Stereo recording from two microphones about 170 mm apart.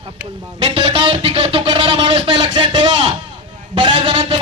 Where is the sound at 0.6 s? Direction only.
35° right (ahead or behind).